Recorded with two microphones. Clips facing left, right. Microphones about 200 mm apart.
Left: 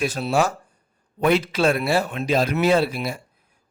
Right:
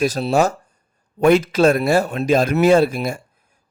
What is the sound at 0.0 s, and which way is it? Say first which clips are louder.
Speech: right 4 dB; 40° right (ahead or behind).